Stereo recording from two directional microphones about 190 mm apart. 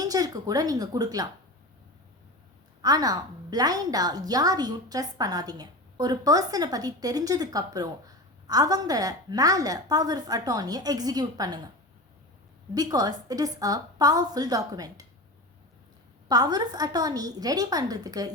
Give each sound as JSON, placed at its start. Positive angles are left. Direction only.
{"t": 0.0, "sound": "a woman's voice", "side_deg": -20}
{"t": 2.8, "sound": "a woman's voice", "side_deg": -20}
{"t": 12.7, "sound": "a woman's voice", "side_deg": -20}
{"t": 16.3, "sound": "a woman's voice", "side_deg": -20}